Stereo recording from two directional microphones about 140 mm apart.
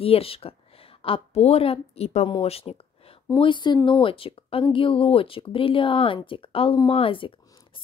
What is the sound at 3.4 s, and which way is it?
Speech, 35° left (ahead or behind).